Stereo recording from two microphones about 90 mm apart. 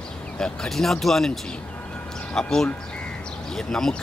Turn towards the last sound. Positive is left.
turn(degrees=5)  # may be behind; listen again after turning